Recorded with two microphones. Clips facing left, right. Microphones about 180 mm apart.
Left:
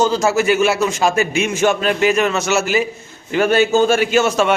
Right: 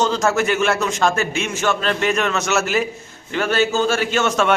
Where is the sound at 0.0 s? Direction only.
5° left (ahead or behind).